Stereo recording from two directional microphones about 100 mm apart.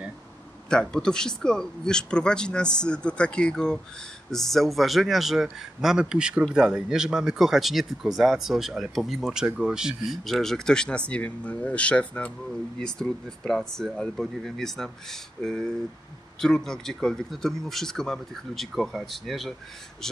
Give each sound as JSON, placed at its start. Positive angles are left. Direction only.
{"t": 0.7, "sound": "speech", "side_deg": 10}